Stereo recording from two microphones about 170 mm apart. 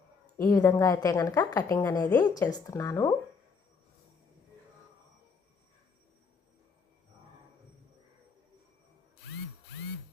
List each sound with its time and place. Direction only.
0.3 s a woman's voice: 20° left (ahead or behind)